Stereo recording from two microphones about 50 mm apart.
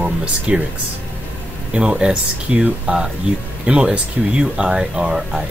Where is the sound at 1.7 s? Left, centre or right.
Centre.